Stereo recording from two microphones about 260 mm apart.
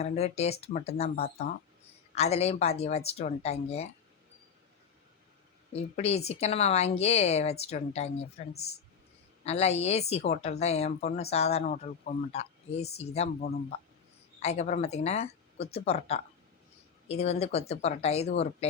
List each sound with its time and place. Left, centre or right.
0.0 s speech: left
1.2 s speech: left
2.1 s speech: left
5.7 s speech: left
9.4 s speech: left